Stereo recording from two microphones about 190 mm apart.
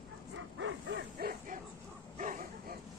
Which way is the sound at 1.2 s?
50° right (ahead or behind).